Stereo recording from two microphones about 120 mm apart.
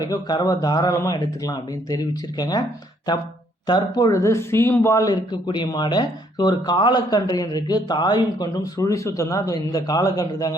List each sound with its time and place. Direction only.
0.0 s speech: 35° left (ahead or behind)
3.7 s speech: 30° left (ahead or behind)